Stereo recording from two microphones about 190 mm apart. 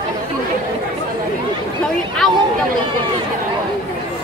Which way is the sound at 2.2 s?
Centre (ahead or behind).